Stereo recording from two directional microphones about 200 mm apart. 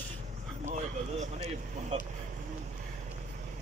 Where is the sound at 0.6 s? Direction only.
35° right (ahead or behind).